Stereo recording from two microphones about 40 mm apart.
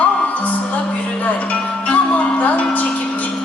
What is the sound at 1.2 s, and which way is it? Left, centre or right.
Speech, left.